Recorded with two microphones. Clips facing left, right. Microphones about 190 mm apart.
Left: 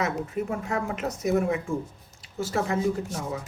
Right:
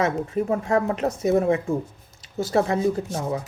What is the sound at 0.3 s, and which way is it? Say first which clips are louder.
Speech: right 9 dB; 25° right (ahead or behind).